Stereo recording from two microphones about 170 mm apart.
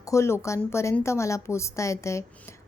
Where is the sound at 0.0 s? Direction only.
15° left (ahead or behind).